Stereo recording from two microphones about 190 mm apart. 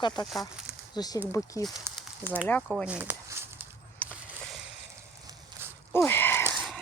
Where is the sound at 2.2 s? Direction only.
10° right (ahead or behind).